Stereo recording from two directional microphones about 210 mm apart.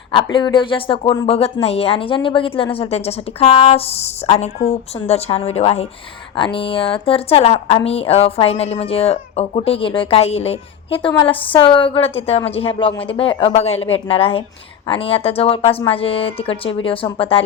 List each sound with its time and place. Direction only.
0.3 s a woman's voice: 20° left (ahead or behind)